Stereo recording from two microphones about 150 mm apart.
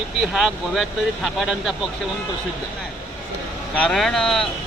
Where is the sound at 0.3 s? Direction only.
Centre (ahead or behind).